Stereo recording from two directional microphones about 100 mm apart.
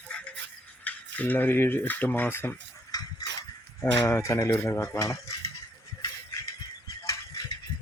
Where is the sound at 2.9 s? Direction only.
40° left (ahead or behind).